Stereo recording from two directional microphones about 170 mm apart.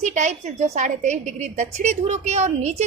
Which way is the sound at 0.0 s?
45° right (ahead or behind).